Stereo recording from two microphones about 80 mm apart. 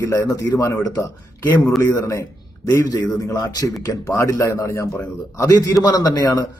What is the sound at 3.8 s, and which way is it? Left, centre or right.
Speech, left.